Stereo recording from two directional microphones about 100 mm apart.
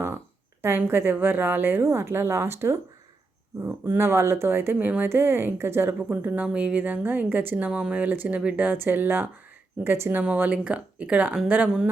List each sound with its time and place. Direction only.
0.6 s a woman's voice: 25° right (ahead or behind)